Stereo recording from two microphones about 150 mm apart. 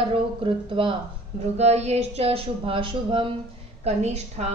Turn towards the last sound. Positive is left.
turn(degrees=-50)  # may be behind; listen again after turning